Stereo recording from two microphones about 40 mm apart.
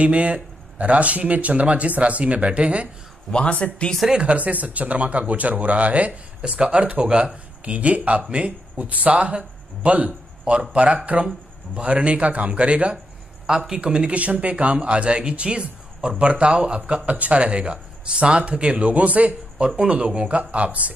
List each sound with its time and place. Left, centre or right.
0.0 s speech: right
3.3 s speech: left
4.1 s speech: right